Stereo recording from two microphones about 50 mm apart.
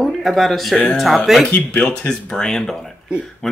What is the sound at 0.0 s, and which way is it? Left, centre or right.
A woman's voice, centre.